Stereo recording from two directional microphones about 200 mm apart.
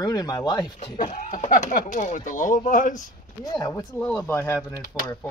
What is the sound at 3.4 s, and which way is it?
Speech, 20° left (ahead or behind).